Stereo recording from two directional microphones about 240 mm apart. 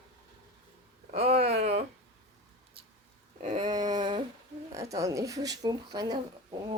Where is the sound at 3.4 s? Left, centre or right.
Right.